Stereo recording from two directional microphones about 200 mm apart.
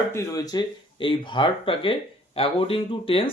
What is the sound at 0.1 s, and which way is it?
Speech, 15° left (ahead or behind).